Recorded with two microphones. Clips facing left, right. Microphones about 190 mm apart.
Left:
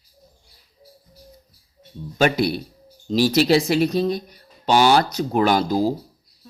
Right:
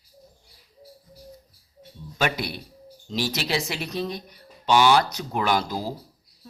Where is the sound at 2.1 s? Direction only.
35° left (ahead or behind).